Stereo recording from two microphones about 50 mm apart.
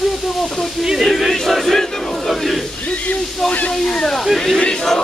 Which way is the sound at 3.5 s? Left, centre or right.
Left.